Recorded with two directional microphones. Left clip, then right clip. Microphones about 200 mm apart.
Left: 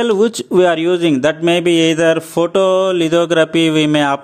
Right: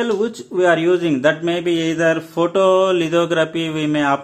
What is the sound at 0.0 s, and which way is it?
A man's voice, 35° left (ahead or behind).